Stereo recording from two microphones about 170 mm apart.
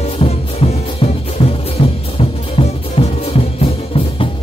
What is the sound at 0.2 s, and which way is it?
Music, 35° left (ahead or behind).